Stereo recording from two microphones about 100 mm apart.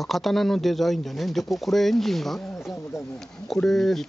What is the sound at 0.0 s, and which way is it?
Speech, centre (ahead or behind).